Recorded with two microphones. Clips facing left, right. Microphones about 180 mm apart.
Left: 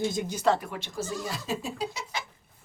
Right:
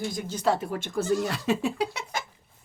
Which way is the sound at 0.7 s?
55° right (ahead or behind).